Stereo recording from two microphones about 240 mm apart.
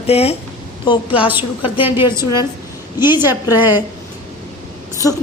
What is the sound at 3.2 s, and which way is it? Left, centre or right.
Speech, centre.